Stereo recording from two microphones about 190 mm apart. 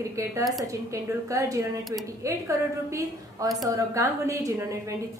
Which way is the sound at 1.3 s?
15° right (ahead or behind).